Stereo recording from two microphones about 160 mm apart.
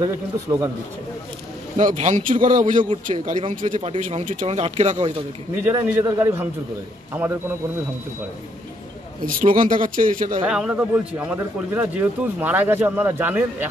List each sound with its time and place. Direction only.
0.0 s a man's voice: 20° right (ahead or behind)
1.8 s speech: 50° right (ahead or behind)
5.6 s speech: 10° right (ahead or behind)
9.2 s a man's voice: 60° right (ahead or behind)
10.5 s speech: 5° right (ahead or behind)